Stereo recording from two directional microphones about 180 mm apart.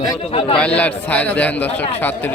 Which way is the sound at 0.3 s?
30° left (ahead or behind).